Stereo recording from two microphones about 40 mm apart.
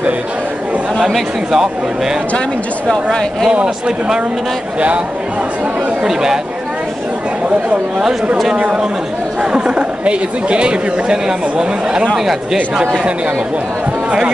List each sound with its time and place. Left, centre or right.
0.9 s chatter: centre
1.5 s speech: centre
2.9 s speech: centre
3.5 s speech: right
6.0 s speech: centre
9.4 s speech: right